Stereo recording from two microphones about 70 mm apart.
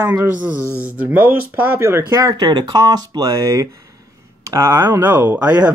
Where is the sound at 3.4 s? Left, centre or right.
Right.